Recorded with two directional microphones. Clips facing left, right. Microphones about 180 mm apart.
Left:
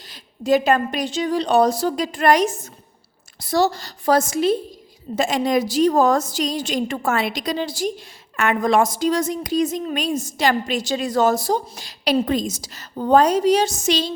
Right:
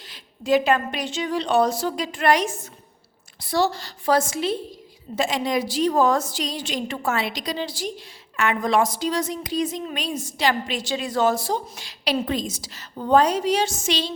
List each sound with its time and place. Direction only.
0.1 s a woman's voice: 40° left (ahead or behind)